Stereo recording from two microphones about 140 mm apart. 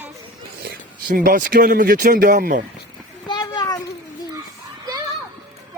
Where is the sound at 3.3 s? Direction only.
30° left (ahead or behind).